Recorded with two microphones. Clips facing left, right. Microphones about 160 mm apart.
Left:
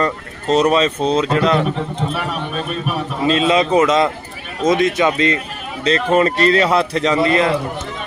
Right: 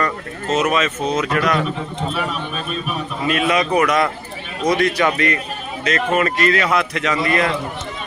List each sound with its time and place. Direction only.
0.0 s speech: 35° left (ahead or behind)
2.1 s a man's voice: 60° left (ahead or behind)
3.2 s a man's voice: 25° left (ahead or behind)